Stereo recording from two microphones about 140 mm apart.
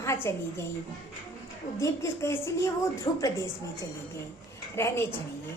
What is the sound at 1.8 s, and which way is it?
A woman's voice, 20° left (ahead or behind).